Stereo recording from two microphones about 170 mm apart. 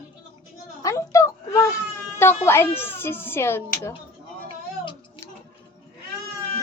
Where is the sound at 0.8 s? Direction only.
20° left (ahead or behind).